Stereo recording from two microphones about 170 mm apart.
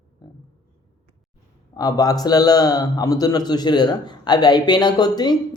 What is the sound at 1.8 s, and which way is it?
A man's voice, 20° left (ahead or behind).